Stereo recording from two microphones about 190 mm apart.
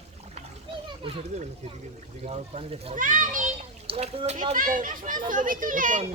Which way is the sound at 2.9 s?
45° right (ahead or behind).